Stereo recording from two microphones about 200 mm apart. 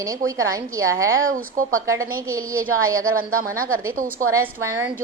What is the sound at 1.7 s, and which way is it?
A woman's voice, 15° right (ahead or behind).